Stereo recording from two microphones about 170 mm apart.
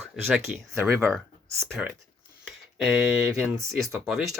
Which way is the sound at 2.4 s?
Centre (ahead or behind).